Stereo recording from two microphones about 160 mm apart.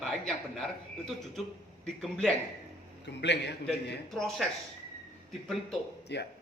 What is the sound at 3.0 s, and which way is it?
Speech, 90° left.